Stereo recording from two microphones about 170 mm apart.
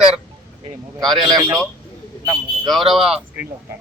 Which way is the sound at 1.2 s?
20° right (ahead or behind).